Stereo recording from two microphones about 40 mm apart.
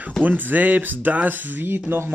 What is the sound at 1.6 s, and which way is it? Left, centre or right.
Speech, right.